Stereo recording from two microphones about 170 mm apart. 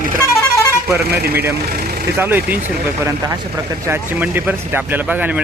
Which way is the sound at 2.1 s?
10° right (ahead or behind).